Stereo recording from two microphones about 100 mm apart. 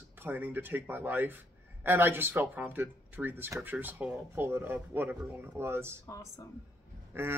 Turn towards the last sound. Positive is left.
turn(degrees=-25)  # may be behind; listen again after turning